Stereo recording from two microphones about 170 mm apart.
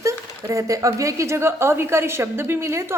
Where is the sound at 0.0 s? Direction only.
15° right (ahead or behind).